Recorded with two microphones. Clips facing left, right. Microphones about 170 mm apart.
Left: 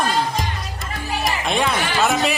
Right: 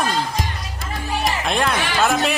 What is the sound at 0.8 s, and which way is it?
Music, centre (ahead or behind).